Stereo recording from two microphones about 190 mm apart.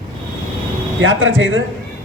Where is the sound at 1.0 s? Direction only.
90° right.